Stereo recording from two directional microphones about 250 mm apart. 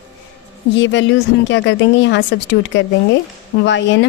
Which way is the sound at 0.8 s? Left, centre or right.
Left.